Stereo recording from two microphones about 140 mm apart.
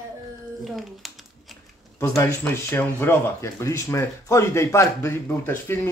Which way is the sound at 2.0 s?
20° left (ahead or behind).